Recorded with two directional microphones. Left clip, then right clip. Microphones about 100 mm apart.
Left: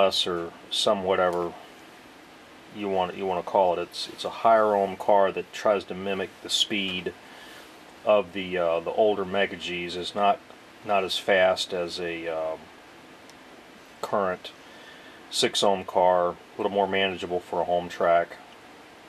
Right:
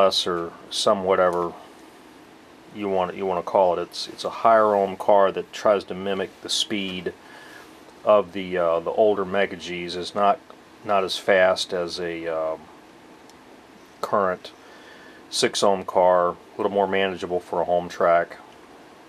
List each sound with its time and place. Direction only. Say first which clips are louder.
0.0 s speech: right 3 dB; 20° right (ahead or behind)
2.8 s speech: right 3 dB; 20° right (ahead or behind)
14.0 s speech: right 4 dB; 20° right (ahead or behind)